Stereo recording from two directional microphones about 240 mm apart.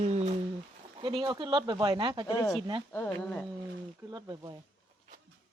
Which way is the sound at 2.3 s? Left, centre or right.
Centre.